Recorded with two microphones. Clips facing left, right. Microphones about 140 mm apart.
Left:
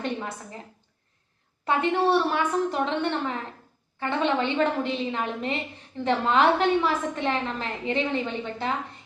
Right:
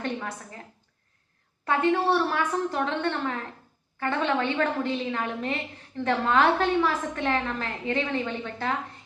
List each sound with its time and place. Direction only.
1.6 s a woman's voice: 20° left (ahead or behind)